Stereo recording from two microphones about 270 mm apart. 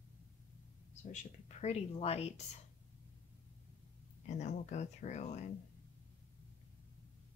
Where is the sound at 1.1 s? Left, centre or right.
Left.